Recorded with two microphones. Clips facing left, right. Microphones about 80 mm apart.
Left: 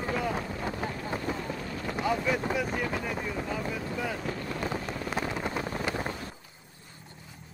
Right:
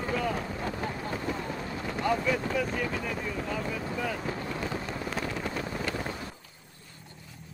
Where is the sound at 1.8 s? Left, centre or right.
Centre.